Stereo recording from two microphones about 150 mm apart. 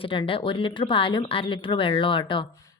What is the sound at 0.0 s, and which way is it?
Speech, 35° left (ahead or behind).